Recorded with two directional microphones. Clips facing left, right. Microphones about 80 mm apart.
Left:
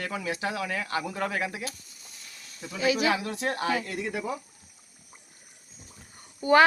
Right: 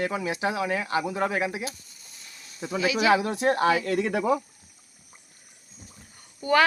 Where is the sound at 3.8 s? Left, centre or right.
Right.